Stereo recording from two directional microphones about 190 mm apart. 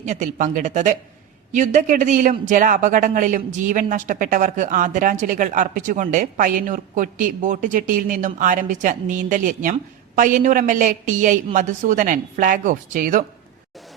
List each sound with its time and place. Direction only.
0.0 s speech: 40° right (ahead or behind)